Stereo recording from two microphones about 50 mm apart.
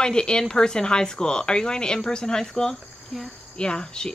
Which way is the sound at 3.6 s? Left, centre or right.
Centre.